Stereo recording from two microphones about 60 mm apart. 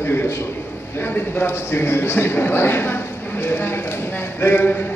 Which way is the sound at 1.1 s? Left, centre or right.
Left.